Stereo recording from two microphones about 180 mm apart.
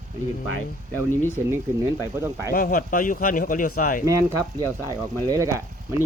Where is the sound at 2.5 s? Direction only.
55° left (ahead or behind).